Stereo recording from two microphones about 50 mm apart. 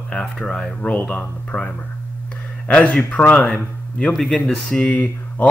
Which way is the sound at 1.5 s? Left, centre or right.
Left.